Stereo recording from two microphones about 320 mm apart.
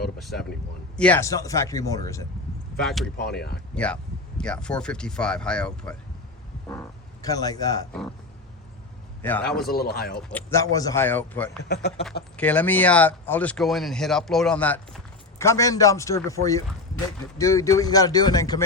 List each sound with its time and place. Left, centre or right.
0.2 s speech: centre
3.2 s speech: left
4.4 s speech: centre
9.6 s speech: left
10.2 s speech: centre
11.7 s speech: left
12.4 s speech: centre